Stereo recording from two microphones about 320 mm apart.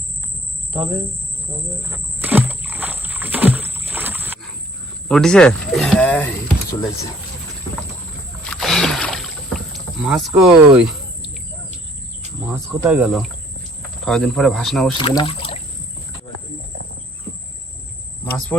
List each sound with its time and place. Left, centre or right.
1.8 s wild animals: centre
5.0 s speech: centre
8.4 s rowboat: centre
12.5 s speech: centre
14.9 s speech: centre